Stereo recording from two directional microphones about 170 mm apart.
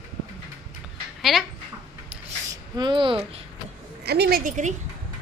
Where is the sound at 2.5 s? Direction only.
25° right (ahead or behind).